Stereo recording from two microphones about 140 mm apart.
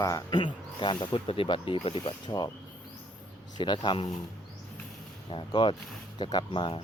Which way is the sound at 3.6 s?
35° left (ahead or behind).